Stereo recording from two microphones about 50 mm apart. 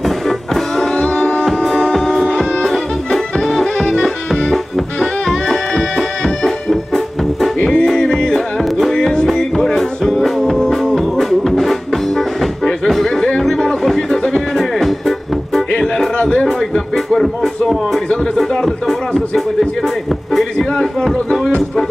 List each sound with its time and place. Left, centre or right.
0.0 s music: centre
0.9 s music: centre
1.4 s music: centre
2.2 s music: centre
2.6 s music: centre
8.9 s music: centre